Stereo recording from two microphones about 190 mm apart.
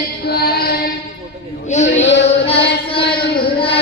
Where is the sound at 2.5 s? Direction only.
30° left (ahead or behind).